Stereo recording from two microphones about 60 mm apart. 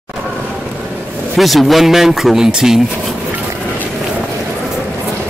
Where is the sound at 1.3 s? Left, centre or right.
Centre.